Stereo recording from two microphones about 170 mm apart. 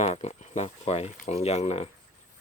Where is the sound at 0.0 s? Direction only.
40° left (ahead or behind).